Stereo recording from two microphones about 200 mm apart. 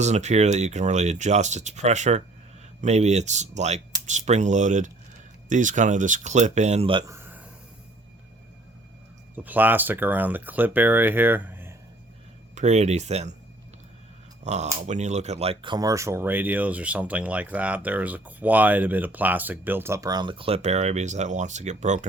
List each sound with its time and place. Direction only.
0.0 s speech: 35° right (ahead or behind)
7.1 s a sound: 10° right (ahead or behind)
9.3 s speech: 10° right (ahead or behind)
12.5 s speech: 35° right (ahead or behind)
14.4 s speech: 35° right (ahead or behind)